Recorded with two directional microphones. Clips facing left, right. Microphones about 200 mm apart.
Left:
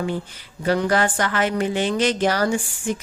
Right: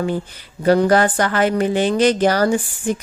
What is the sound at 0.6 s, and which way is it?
Speech, 40° right (ahead or behind).